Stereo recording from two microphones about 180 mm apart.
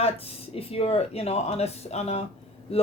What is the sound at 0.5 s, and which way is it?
Speech, 35° left (ahead or behind).